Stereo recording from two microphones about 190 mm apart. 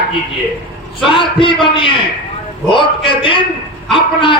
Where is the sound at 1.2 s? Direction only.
25° left (ahead or behind).